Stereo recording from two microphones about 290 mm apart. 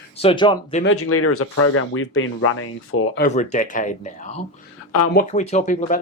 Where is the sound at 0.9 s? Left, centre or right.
Left.